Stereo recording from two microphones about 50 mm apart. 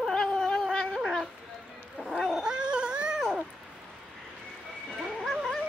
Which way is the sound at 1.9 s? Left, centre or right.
Centre.